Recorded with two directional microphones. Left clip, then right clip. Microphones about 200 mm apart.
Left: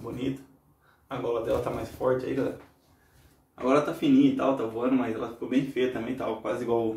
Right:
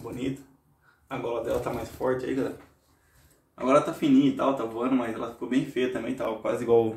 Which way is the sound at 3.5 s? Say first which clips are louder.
Right 2 dB; 35° right (ahead or behind).